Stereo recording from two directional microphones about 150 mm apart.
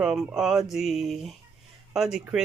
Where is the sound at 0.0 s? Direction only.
5° right (ahead or behind).